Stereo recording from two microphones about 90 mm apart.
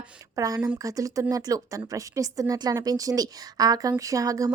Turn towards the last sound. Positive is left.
turn(degrees=-40)  # may be behind; listen again after turning